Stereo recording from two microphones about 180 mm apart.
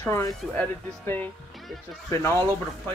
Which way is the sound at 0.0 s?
15° left (ahead or behind).